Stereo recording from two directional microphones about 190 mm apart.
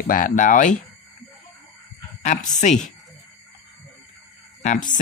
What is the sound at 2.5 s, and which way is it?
Speech, 40° left (ahead or behind).